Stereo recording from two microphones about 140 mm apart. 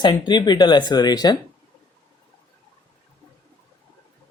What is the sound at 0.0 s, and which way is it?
Speech, 30° left (ahead or behind).